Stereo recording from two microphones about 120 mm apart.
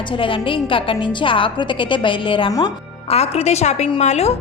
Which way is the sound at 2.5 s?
30° left (ahead or behind).